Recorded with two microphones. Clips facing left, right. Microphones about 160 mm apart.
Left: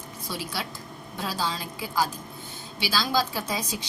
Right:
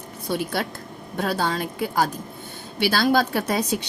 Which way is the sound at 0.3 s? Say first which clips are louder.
Right 8 dB; 55° right (ahead or behind).